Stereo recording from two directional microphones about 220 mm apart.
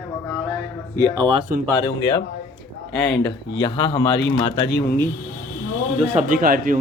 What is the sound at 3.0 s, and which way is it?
Speech, 50° left (ahead or behind).